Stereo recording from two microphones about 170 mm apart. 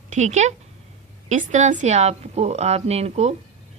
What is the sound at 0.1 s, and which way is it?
A woman's voice, 45° right (ahead or behind).